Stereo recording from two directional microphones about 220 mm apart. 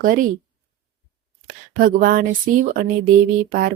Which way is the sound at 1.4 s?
40° right (ahead or behind).